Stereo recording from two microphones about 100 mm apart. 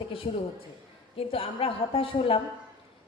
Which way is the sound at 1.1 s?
65° left (ahead or behind).